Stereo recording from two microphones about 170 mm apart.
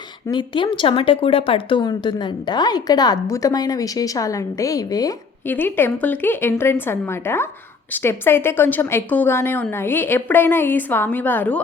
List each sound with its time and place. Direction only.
0.3 s a woman's voice: 30° left (ahead or behind); by 11.6 s 10° left (ahead or behind)